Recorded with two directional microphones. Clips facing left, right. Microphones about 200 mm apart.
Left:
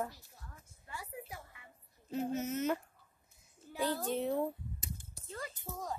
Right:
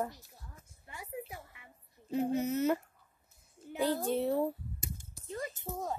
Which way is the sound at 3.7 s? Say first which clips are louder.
Right 4 dB; 10° right (ahead or behind).